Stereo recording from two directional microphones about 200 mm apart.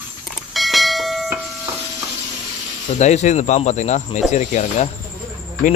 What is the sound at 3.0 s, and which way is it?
Speech, 35° left (ahead or behind).